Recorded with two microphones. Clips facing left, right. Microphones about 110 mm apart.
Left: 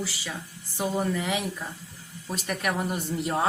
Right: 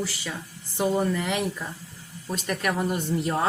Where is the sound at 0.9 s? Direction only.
5° left (ahead or behind).